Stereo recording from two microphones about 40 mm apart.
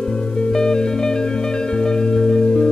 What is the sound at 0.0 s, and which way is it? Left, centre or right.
Music, centre.